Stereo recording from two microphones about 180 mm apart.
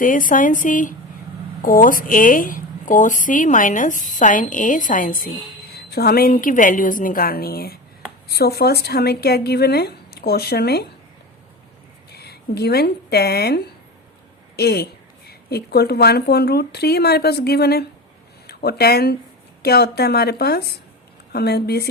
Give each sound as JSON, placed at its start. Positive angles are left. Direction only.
{"t": 0.0, "sound": "a woman's voice", "side_deg": 50}
{"t": 5.7, "sound": "a woman's voice", "side_deg": 60}
{"t": 12.1, "sound": "a woman's voice", "side_deg": 65}